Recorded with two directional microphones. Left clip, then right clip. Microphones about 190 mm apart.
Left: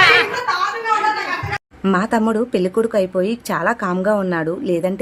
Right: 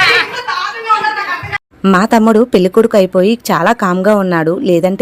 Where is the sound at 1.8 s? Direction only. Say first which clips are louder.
Right 8 dB; 35° right (ahead or behind).